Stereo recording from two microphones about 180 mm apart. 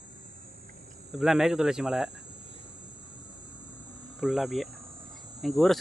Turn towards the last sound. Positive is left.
turn(degrees=0)  # may be behind; listen again after turning